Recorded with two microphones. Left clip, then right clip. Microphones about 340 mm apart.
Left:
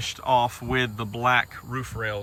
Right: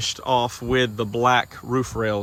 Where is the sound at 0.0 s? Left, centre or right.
Centre.